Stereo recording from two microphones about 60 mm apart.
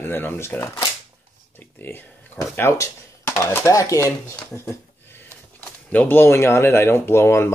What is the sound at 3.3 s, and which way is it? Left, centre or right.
Speech, left.